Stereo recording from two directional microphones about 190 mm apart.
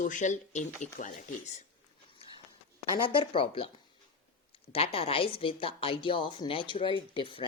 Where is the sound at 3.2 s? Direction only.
30° left (ahead or behind).